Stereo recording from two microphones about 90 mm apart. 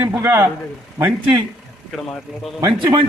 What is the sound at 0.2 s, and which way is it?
Speech, 25° right (ahead or behind).